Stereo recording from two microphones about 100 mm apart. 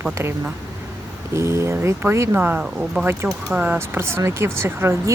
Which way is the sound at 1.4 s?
30° right (ahead or behind).